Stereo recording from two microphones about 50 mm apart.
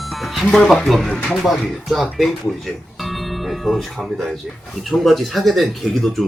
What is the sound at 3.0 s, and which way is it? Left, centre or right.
Music, centre.